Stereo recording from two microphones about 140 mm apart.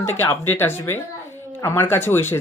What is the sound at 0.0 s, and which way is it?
Speech, 15° left (ahead or behind).